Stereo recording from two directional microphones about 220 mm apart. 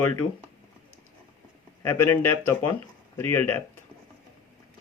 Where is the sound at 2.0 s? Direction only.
90° left.